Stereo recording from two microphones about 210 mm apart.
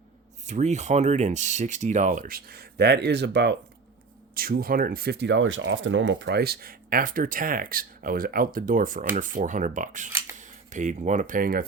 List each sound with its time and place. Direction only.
0.4 s speech: 35° right (ahead or behind); by 3.5 s 55° right (ahead or behind)
4.4 s speech: 45° right (ahead or behind)